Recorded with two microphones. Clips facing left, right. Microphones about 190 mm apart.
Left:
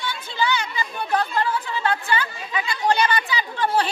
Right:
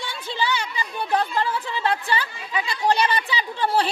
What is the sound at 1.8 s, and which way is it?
Speech, 30° right (ahead or behind).